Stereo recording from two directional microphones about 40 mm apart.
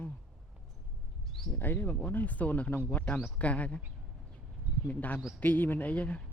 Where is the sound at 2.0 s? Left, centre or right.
Left.